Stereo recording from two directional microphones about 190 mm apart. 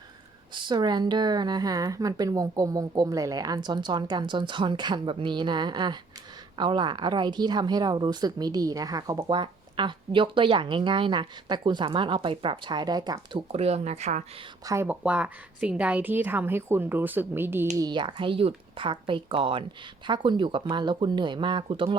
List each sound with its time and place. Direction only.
0.5 s speech: 25° right (ahead or behind)
13.5 s speech: 35° right (ahead or behind)
14.6 s a woman's voice: 15° right (ahead or behind)
17.7 s speech: 20° right (ahead or behind)